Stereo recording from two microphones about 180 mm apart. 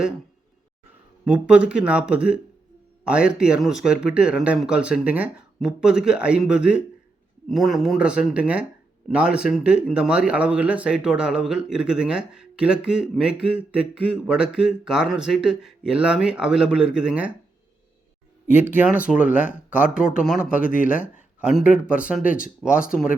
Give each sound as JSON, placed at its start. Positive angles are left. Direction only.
{"t": 1.2, "sound": "speech", "side_deg": -5}
{"t": 18.6, "sound": "speech", "side_deg": -10}
{"t": 20.2, "sound": "speech", "side_deg": 0}
{"t": 20.7, "sound": "speech", "side_deg": 45}
{"t": 21.4, "sound": "speech", "side_deg": -5}